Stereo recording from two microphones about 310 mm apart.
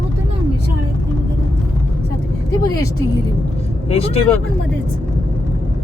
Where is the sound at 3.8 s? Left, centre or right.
Centre.